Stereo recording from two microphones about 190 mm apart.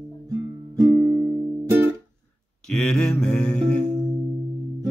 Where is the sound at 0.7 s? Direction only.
20° right (ahead or behind).